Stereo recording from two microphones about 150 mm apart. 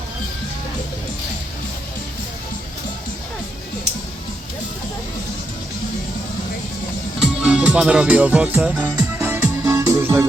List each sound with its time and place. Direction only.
7.2 s music: 10° right (ahead or behind)